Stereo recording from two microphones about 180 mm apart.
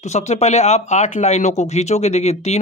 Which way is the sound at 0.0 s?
40° left (ahead or behind).